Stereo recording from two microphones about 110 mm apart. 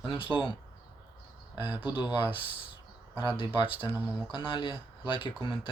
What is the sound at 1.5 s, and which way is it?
Speech, 15° right (ahead or behind).